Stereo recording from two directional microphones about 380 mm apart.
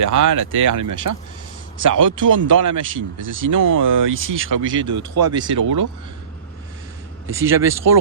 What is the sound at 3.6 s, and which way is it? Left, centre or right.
Speech, right.